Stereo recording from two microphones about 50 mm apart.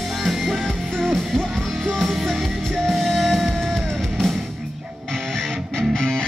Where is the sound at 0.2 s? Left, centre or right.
Centre.